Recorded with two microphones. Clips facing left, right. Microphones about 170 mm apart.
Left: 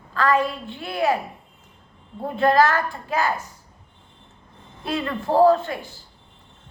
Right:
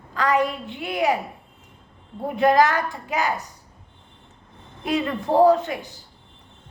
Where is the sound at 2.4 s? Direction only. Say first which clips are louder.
Even; 15° right (ahead or behind).